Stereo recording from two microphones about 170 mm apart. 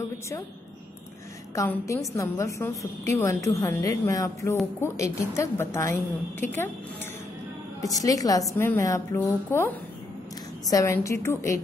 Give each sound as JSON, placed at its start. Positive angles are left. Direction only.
{"t": 1.5, "sound": "a woman's voice", "side_deg": 20}
{"t": 7.8, "sound": "a woman's voice", "side_deg": 20}
{"t": 10.7, "sound": "a woman's voice", "side_deg": 20}